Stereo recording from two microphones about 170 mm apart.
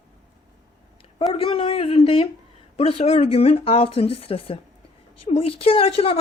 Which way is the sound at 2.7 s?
35° left (ahead or behind).